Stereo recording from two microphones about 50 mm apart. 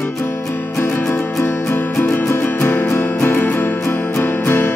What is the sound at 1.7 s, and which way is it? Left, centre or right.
Music, left.